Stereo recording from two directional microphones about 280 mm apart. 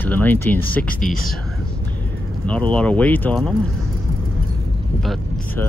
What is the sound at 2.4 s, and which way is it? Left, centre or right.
Speech, centre.